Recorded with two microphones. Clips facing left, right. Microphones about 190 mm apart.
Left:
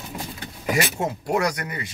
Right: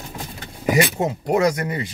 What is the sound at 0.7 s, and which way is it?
Speech, 20° right (ahead or behind).